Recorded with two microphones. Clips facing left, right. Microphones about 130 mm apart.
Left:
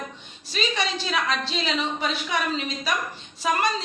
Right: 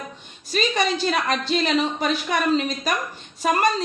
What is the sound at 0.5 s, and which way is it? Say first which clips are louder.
A woman's voice: right 5 dB; 50° right (ahead or behind).